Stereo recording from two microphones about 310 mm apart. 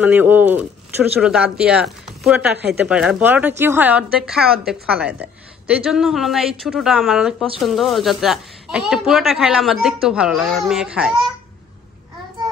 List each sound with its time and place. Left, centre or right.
0.0 s a woman's voice: centre